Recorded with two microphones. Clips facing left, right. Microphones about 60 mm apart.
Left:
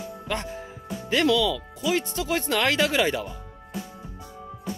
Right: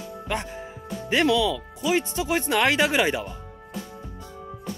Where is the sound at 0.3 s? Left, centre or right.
Right.